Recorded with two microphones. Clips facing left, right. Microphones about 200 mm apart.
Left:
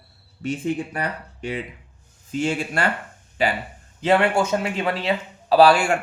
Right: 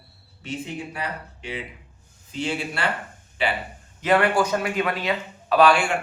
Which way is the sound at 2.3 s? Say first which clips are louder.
Left 4 dB; 45° left (ahead or behind).